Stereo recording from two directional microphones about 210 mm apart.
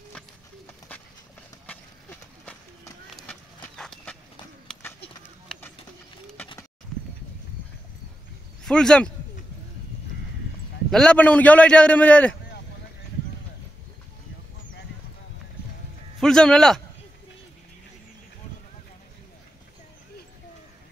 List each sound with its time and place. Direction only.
1.7 s run: 5° left (ahead or behind)
3.6 s horse: 5° left (ahead or behind)
8.6 s speech: 5° left (ahead or behind)
10.9 s a man's voice: 5° left (ahead or behind)
16.2 s a man's voice: 5° left (ahead or behind)